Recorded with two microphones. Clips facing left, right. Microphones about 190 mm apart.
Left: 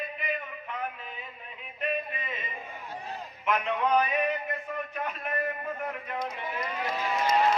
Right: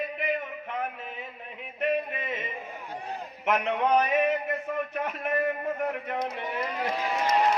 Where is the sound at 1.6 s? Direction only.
65° right (ahead or behind).